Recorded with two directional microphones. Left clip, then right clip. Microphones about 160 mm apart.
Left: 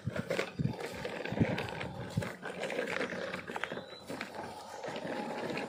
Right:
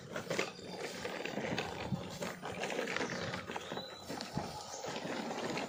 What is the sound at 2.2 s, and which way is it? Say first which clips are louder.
Roaring cats: left 2 dB; 35° left (ahead or behind).